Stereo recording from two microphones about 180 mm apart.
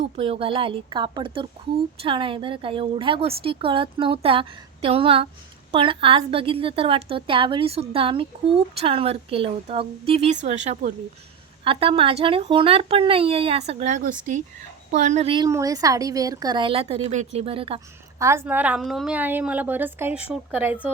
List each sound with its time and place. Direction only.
0.0 s a woman's voice: 35° right (ahead or behind)
15.4 s a woman's voice: 20° right (ahead or behind)
18.2 s a woman's voice: 15° right (ahead or behind)